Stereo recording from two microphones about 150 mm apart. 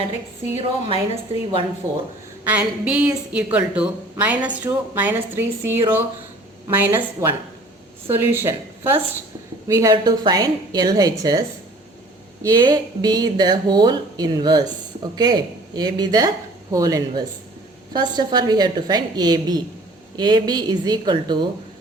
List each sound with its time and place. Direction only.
0.5 s a woman's voice: 40° right (ahead or behind)
1.8 s speech: 15° right (ahead or behind)